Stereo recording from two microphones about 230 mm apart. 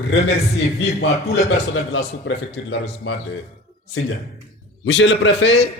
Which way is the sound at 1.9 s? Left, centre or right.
Left.